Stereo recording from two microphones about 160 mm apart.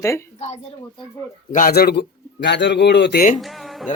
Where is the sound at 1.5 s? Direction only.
65° left (ahead or behind).